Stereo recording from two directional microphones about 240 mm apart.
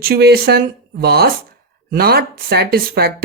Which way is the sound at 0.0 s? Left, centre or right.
Right.